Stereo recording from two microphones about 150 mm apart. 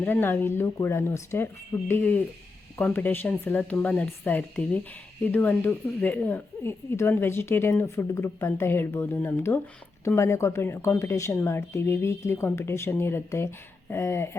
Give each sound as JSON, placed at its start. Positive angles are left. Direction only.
{"t": 0.0, "sound": "speech", "side_deg": 15}